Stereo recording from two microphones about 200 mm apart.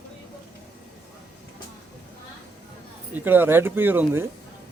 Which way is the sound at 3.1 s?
10° right (ahead or behind).